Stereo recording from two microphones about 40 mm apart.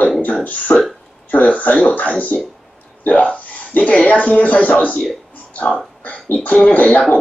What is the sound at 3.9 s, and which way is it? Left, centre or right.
Speech, left.